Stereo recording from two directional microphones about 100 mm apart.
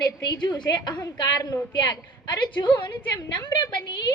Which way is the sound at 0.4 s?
45° left (ahead or behind).